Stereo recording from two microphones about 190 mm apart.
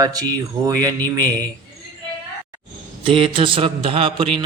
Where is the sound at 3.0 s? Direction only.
30° right (ahead or behind).